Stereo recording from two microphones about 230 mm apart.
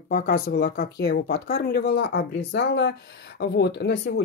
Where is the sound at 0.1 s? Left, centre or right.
Left.